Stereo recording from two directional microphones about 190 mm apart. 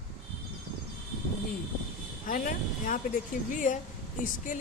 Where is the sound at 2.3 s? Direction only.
45° left (ahead or behind).